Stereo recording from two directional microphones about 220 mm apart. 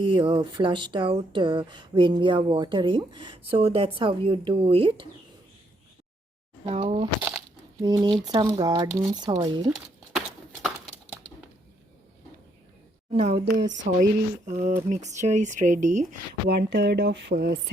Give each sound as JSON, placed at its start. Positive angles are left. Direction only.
{"t": 0.0, "sound": "speech", "side_deg": -25}
{"t": 6.7, "sound": "speech", "side_deg": -25}
{"t": 7.2, "sound": "crumpling", "side_deg": -5}
{"t": 7.8, "sound": "speech", "side_deg": -20}
{"t": 13.4, "sound": "speech", "side_deg": -50}
{"t": 14.4, "sound": "speech", "side_deg": -35}
{"t": 16.5, "sound": "speech", "side_deg": -50}